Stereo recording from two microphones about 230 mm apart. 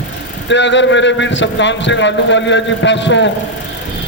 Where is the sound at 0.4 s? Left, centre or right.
Left.